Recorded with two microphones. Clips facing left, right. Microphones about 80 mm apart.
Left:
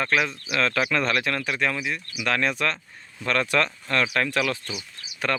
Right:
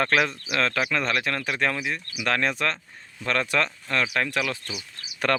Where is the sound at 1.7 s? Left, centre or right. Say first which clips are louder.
Even; right.